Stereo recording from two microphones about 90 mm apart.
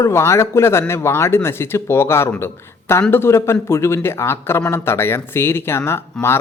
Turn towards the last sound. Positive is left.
turn(degrees=30)  # may be behind; listen again after turning